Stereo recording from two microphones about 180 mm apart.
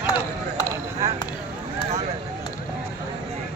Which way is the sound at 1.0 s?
15° right (ahead or behind).